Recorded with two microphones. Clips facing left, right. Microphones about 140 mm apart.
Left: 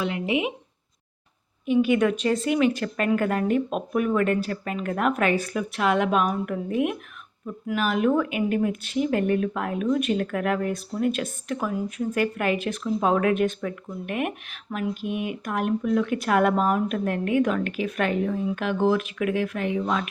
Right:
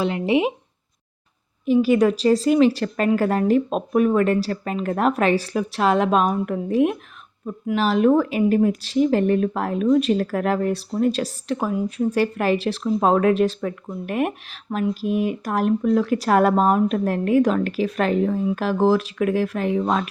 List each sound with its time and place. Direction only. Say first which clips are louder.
0.0 s speech: right 5 dB; 35° right (ahead or behind)
1.6 s speech: right 4 dB; 35° right (ahead or behind)